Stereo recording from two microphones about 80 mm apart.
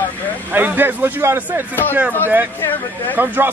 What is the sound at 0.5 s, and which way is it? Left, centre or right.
Speech, right.